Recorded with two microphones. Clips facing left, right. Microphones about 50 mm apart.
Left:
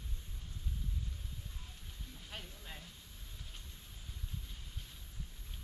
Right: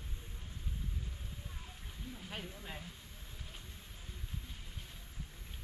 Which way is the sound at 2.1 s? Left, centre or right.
Centre.